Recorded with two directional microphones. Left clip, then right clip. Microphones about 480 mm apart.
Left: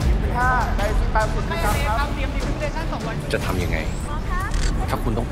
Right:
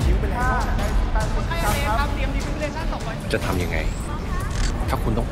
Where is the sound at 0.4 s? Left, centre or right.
Centre.